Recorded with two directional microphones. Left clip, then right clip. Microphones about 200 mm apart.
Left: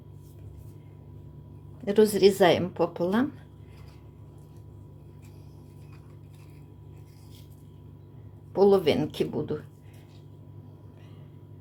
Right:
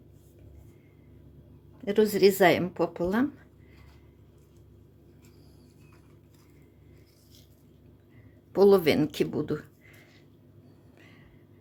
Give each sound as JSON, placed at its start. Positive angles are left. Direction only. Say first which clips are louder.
{"t": 1.8, "sound": "a woman's voice", "louder": "left 2 dB", "side_deg": -15}
{"t": 8.5, "sound": "speech", "louder": "right 1 dB", "side_deg": -25}